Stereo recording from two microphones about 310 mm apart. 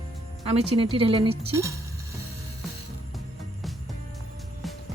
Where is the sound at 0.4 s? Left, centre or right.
Centre.